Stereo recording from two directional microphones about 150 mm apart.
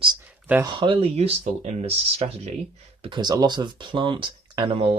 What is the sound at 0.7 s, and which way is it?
Speech, 35° right (ahead or behind).